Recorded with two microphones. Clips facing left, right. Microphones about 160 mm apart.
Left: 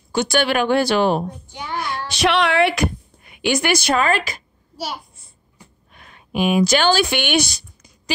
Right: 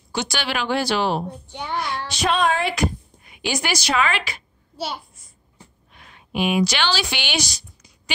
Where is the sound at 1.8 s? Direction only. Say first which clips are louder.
Left 5 dB; 70° left (ahead or behind); by 4.4 s 40° left (ahead or behind).